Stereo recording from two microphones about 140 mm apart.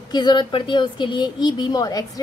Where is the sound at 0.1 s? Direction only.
30° left (ahead or behind).